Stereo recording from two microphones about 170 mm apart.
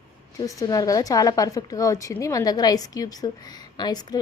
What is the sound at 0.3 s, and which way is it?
A woman's voice, 20° left (ahead or behind).